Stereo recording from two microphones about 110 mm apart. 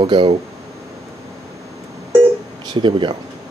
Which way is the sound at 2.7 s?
45° right (ahead or behind).